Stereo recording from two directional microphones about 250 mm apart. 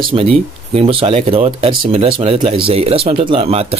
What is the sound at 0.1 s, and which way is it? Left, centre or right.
Speech, right.